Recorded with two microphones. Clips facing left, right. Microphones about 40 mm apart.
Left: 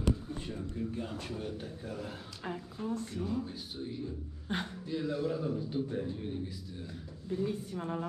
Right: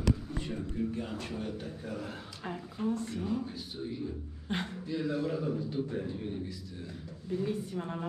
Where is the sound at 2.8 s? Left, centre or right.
Right.